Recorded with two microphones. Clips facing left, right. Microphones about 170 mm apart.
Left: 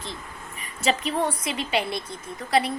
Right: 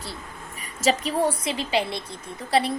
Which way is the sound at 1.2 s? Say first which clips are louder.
Right 3 dB; 30° right (ahead or behind).